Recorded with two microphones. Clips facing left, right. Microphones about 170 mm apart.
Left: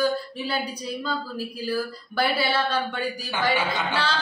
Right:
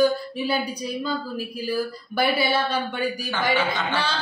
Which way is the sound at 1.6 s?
15° right (ahead or behind).